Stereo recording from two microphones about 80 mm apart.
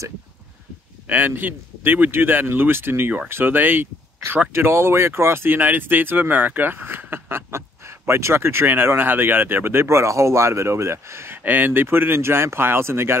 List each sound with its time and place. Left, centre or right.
1.0 s speech: right